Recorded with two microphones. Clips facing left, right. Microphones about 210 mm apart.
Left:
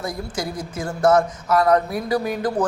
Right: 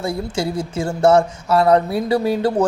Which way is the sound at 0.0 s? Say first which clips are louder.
Right 5 dB; 25° right (ahead or behind).